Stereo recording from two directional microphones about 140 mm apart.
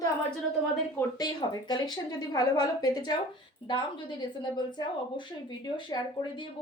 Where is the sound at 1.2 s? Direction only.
30° left (ahead or behind).